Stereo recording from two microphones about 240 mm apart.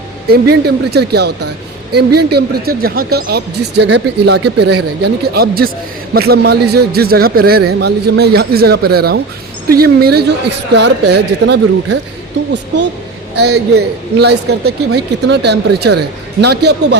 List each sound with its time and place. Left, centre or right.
0.3 s a man's voice: right
13.3 s speech: right